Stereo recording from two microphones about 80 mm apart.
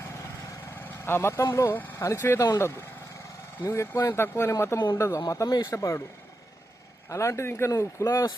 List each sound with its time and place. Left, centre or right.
0.8 s vehicle: left
1.5 s speech: left
1.7 s speech: left
7.1 s speech: left